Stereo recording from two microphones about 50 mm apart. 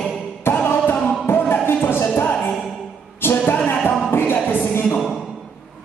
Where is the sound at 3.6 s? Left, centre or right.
Left.